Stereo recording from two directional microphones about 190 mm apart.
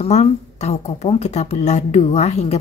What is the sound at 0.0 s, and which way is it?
Speech, 35° left (ahead or behind).